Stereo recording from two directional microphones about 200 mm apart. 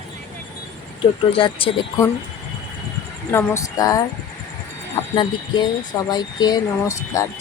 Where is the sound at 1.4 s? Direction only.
25° left (ahead or behind).